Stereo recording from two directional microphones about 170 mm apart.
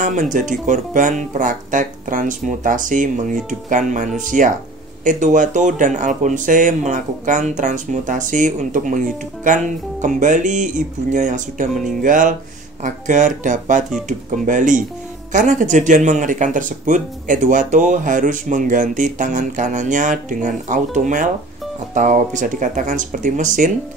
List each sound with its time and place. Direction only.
0.0 s speech: 45° right (ahead or behind)